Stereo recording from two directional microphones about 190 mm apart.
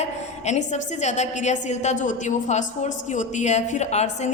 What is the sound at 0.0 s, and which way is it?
A woman's voice, 35° left (ahead or behind).